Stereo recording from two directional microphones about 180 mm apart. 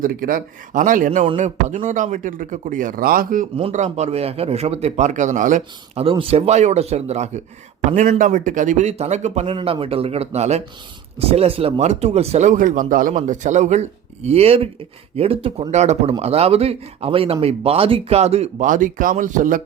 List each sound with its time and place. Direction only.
0.0 s speech: 50° right (ahead or behind)
3.6 s a man's voice: 40° right (ahead or behind)